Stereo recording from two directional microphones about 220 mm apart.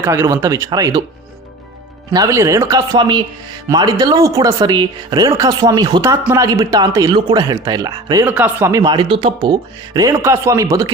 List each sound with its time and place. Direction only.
0.0 s a woman's voice: 15° right (ahead or behind)
2.1 s a woman's voice: 15° right (ahead or behind)
8.2 s a woman's voice: 5° right (ahead or behind)